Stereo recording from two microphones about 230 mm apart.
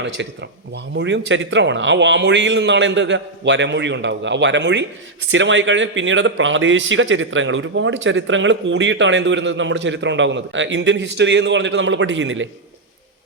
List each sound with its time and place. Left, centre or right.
0.2 s a man's voice: right